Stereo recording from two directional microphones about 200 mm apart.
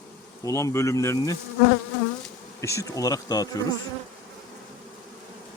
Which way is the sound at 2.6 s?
15° left (ahead or behind).